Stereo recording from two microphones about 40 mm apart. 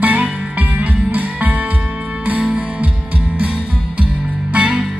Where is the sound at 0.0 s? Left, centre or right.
Right.